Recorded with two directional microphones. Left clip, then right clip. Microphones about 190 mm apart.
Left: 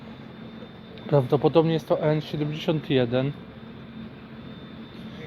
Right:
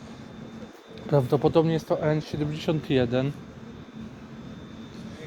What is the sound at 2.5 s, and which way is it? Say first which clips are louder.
Speech: left 2 dB; 25° right (ahead or behind).